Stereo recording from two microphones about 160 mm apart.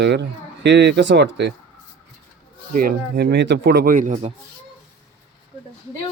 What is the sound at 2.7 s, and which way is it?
Speech, 60° right (ahead or behind).